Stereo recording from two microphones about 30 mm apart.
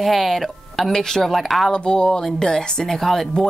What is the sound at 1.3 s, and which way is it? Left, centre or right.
Speech, centre.